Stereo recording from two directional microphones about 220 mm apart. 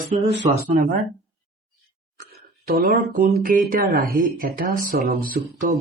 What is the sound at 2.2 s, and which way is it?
Music, 40° right (ahead or behind).